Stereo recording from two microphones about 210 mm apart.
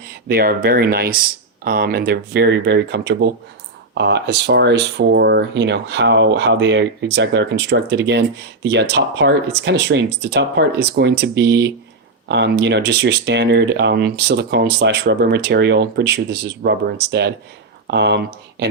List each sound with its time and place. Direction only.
0.3 s speech: 45° right (ahead or behind)